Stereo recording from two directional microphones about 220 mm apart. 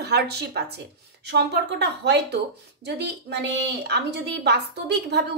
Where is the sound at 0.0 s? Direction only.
45° right (ahead or behind).